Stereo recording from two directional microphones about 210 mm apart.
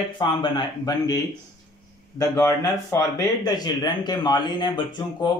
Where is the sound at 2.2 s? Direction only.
15° left (ahead or behind).